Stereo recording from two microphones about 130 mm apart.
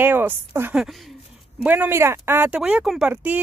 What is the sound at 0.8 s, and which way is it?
Speech, centre (ahead or behind).